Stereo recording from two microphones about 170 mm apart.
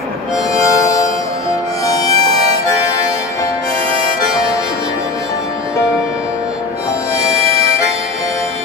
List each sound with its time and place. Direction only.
1.9 s music: 20° left (ahead or behind)
7.4 s harmonica: 35° right (ahead or behind)